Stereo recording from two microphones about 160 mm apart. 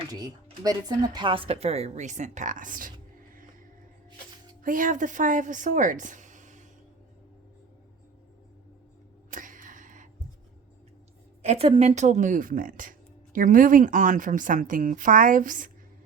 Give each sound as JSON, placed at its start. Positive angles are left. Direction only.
{"t": 0.1, "sound": "speech", "side_deg": -25}
{"t": 4.6, "sound": "a woman's voice", "side_deg": -55}
{"t": 9.3, "sound": "a sound", "side_deg": -55}
{"t": 11.4, "sound": "speech", "side_deg": -40}